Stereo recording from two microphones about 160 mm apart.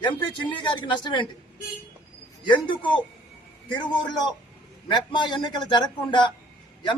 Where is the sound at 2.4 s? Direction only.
30° left (ahead or behind).